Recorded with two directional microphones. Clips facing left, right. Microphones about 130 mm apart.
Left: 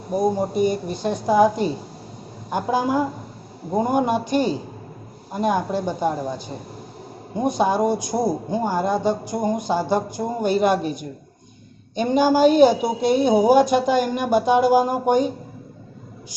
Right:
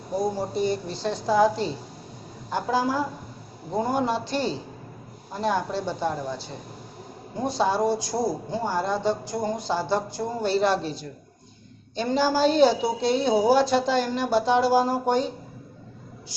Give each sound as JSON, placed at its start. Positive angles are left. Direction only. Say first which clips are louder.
{"t": 0.1, "sound": "speech", "louder": "left 5 dB", "side_deg": 15}